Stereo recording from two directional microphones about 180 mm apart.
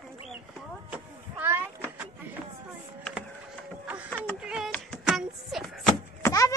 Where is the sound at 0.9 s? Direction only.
10° right (ahead or behind).